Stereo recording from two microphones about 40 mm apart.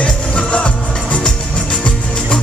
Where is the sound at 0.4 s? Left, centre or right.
Left.